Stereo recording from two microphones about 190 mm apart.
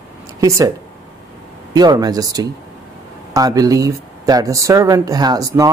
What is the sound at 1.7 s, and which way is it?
Speech, 20° right (ahead or behind).